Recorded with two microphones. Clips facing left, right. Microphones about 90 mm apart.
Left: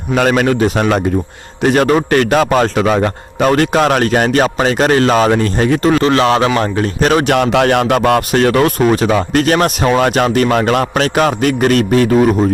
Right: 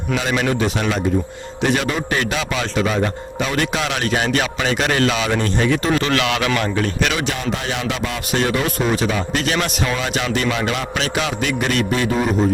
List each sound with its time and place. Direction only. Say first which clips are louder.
0.2 s a man's voice: left 9 dB; 50° left (ahead or behind)
7.3 s a man's voice: left 12 dB; 65° left (ahead or behind); by 12.0 s 50° left (ahead or behind)